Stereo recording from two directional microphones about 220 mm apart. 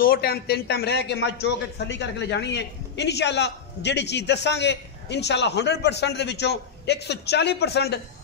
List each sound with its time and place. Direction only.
0.0 s a man's voice: 45° left (ahead or behind)